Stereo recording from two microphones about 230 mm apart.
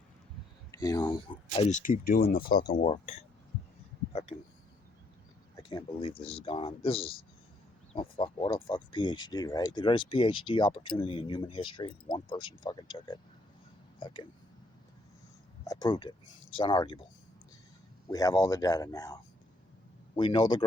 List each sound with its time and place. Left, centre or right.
0.7 s speech: centre; by 2.6 s left
2.6 s speech: left
5.6 s speech: left
15.6 s speech: centre
18.1 s speech: centre